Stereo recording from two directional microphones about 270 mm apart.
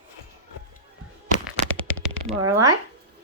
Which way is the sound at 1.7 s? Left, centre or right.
Centre.